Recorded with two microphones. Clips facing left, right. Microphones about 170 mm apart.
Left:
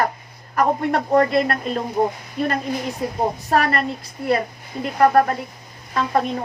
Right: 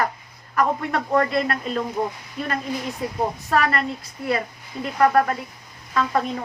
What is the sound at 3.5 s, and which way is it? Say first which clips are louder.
Speech: left 2 dB; 35° left (ahead or behind).